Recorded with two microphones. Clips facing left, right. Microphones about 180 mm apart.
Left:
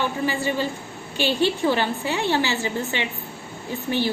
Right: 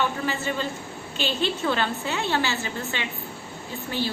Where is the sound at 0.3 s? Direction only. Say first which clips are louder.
Left 4 dB; 10° left (ahead or behind).